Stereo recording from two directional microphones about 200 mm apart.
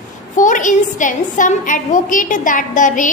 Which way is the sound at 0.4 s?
40° left (ahead or behind).